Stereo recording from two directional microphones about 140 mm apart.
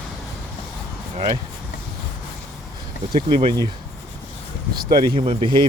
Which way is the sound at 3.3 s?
35° right (ahead or behind).